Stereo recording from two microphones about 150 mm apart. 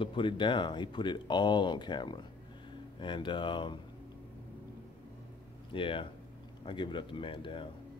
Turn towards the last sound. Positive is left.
turn(degrees=35)  # may be behind; listen again after turning